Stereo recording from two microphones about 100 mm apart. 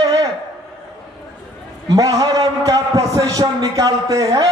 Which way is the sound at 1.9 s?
35° right (ahead or behind).